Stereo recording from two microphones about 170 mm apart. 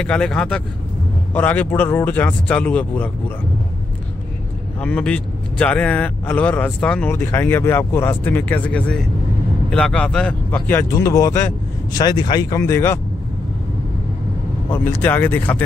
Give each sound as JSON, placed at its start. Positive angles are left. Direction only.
{"t": 0.0, "sound": "speech", "side_deg": 5}
{"t": 4.7, "sound": "speech", "side_deg": 5}
{"t": 14.7, "sound": "speech", "side_deg": 10}